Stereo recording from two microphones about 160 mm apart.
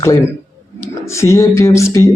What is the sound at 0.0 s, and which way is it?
A man's voice, 20° left (ahead or behind).